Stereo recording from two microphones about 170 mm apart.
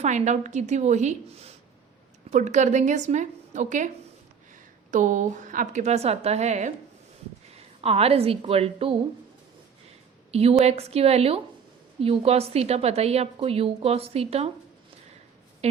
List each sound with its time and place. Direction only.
0.0 s a woman's voice: 45° right (ahead or behind)
4.9 s a woman's voice: 50° right (ahead or behind)
7.8 s a woman's voice: 35° right (ahead or behind)
10.6 s a woman's voice: 40° right (ahead or behind)
15.6 s a sound: 40° right (ahead or behind)